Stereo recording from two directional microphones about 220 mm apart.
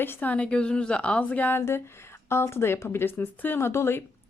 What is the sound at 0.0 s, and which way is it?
A woman's voice, 10° left (ahead or behind).